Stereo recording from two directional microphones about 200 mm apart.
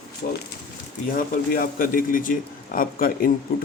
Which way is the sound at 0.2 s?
45° left (ahead or behind).